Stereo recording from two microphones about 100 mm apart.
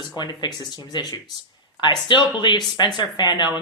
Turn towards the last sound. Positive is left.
turn(degrees=50)  # may be behind; listen again after turning